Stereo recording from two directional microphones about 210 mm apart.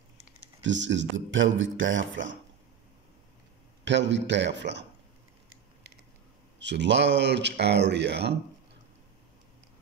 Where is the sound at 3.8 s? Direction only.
55° right (ahead or behind).